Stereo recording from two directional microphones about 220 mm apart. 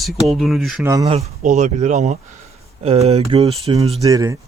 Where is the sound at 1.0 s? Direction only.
30° right (ahead or behind).